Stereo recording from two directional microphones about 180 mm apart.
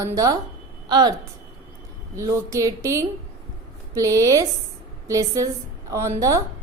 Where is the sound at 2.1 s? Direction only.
15° right (ahead or behind).